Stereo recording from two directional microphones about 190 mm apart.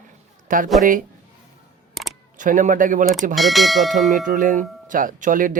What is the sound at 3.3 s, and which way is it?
Speech, centre (ahead or behind).